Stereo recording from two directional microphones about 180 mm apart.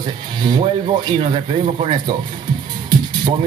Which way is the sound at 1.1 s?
30° right (ahead or behind).